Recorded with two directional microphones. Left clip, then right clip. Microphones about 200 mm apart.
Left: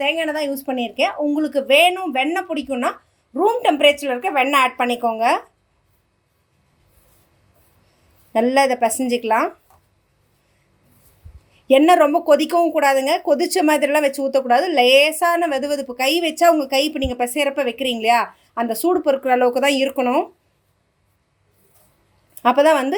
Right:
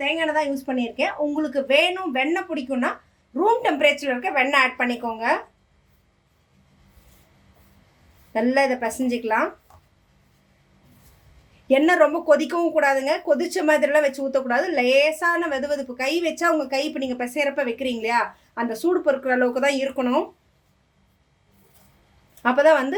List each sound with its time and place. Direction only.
0.0 s speech: 45° left (ahead or behind)
8.3 s speech: 40° left (ahead or behind)
11.7 s speech: 35° left (ahead or behind)
22.4 s speech: 35° left (ahead or behind)